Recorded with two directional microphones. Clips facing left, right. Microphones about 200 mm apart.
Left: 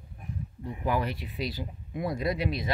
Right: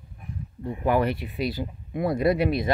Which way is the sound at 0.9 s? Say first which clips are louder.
Right 7 dB; 60° right (ahead or behind).